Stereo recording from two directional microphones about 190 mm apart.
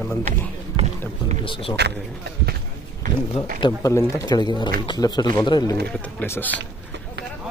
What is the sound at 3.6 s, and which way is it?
Speech, 20° left (ahead or behind).